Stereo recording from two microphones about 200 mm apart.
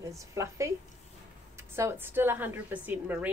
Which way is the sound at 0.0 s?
15° right (ahead or behind).